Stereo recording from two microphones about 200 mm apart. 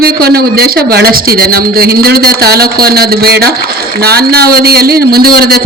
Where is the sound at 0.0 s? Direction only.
50° right (ahead or behind).